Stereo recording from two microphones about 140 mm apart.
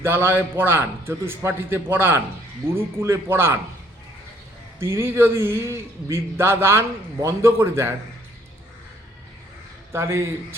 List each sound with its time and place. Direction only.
0.0 s a man's voice: 15° right (ahead or behind)
4.8 s a man's voice: 20° right (ahead or behind)
9.9 s a man's voice: 20° right (ahead or behind)